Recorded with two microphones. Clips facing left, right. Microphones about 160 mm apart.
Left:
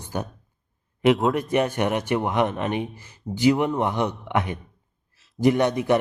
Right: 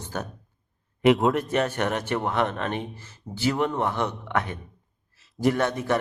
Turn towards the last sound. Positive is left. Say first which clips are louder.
# left 4 dB
turn(degrees=15)  # may be behind; listen again after turning